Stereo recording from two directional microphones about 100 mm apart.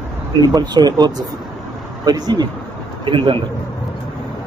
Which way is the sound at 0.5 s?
40° right (ahead or behind).